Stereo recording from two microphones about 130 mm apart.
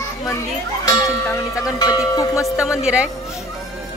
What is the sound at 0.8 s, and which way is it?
Music, 25° left (ahead or behind).